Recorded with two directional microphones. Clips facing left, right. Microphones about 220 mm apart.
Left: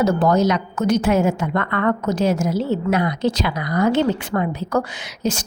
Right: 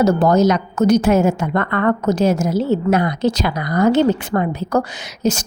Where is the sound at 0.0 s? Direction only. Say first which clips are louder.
Right 3 dB; 40° right (ahead or behind).